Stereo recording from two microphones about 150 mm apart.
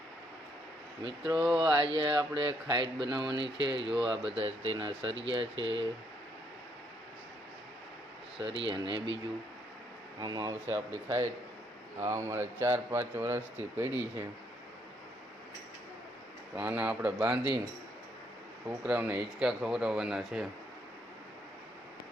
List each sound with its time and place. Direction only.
1.0 s speech: 25° right (ahead or behind)
8.4 s speech: 35° right (ahead or behind)
10.2 s speech: 25° right (ahead or behind)
16.6 s speech: 10° right (ahead or behind)
18.9 s speech: 10° right (ahead or behind)